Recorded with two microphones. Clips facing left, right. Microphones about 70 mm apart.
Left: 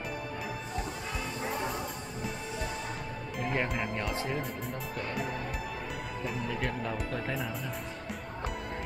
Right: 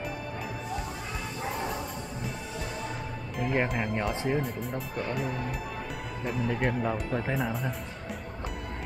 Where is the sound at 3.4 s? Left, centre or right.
Centre.